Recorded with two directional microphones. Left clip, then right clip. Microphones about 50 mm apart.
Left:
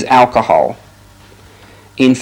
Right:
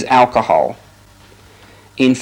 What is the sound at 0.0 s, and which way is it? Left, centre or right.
Speech, right.